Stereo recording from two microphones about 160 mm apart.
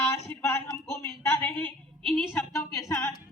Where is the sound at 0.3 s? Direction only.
15° left (ahead or behind).